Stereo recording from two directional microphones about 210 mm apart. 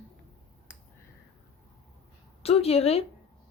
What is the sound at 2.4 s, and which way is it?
Speech, 30° left (ahead or behind).